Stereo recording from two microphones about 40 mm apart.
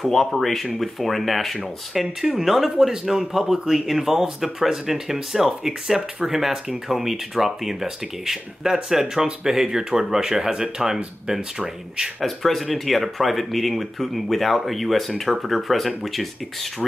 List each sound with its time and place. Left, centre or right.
0.0 s speech: centre
12.2 s speech: centre